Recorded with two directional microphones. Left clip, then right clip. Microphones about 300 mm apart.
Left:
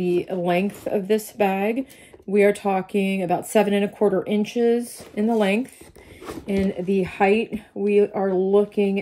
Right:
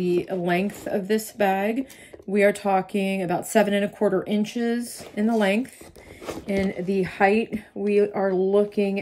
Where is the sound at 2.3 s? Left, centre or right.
Centre.